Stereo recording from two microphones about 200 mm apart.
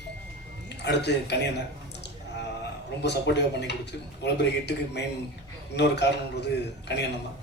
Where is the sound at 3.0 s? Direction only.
60° left (ahead or behind).